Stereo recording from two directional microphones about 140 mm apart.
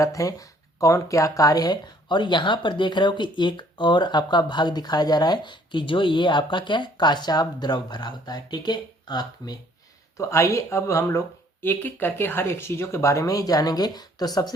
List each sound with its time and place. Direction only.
0.0 s speech: 25° left (ahead or behind)